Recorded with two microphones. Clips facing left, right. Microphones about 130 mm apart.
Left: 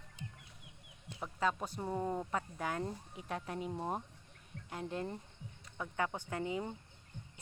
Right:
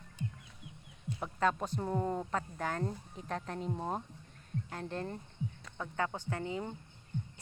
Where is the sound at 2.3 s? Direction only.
10° left (ahead or behind).